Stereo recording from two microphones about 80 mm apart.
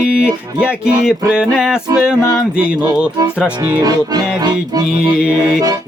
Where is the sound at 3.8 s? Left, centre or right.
Right.